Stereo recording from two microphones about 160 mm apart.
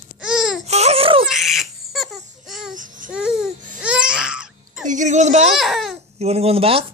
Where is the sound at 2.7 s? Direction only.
55° right (ahead or behind).